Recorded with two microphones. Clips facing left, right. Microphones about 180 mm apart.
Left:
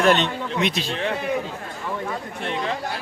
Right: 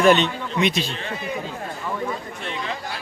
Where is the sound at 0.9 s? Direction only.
65° left (ahead or behind).